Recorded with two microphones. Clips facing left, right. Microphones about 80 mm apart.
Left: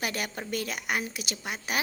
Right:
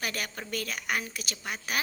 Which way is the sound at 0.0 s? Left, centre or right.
Centre.